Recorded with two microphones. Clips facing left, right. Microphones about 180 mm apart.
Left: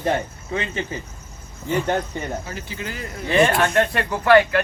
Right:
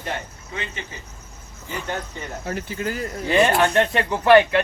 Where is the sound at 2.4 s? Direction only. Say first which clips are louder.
Right 5 dB; 55° right (ahead or behind).